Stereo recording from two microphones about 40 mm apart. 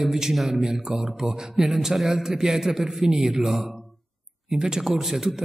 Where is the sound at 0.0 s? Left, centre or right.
Centre.